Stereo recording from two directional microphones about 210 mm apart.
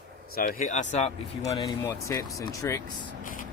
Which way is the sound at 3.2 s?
40° left (ahead or behind).